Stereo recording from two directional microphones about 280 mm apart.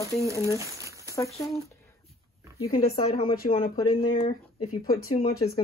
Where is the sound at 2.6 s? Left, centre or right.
Centre.